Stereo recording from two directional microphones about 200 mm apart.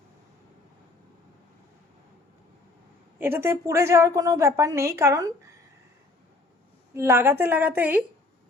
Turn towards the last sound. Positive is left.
turn(degrees=-10)  # may be behind; listen again after turning